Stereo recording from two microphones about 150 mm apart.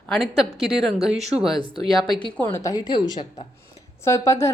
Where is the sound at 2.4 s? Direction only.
20° left (ahead or behind).